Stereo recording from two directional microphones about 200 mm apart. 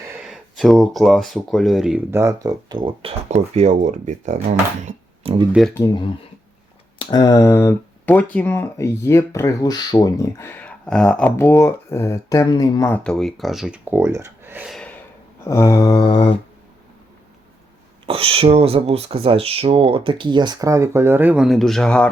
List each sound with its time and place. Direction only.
0.2 s speech: centre (ahead or behind); by 4.4 s 35° right (ahead or behind)
5.2 s a sound: 30° right (ahead or behind)
5.5 s speech: centre (ahead or behind)
5.7 s mantra: 20° left (ahead or behind)
7.0 s speech: 20° left (ahead or behind); by 14.9 s centre (ahead or behind)
15.4 s mantra: 15° left (ahead or behind)
18.0 s speech: 30° right (ahead or behind); by 22.1 s 5° left (ahead or behind)